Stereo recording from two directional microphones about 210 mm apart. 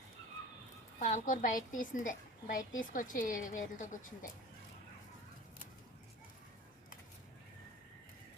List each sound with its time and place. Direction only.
0.9 s a woman's voice: 40° left (ahead or behind)